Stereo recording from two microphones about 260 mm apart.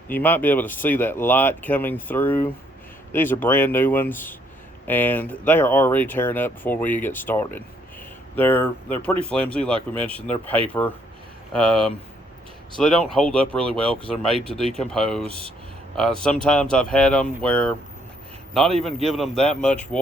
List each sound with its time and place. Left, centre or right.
0.1 s speech: centre
11.5 s speech: centre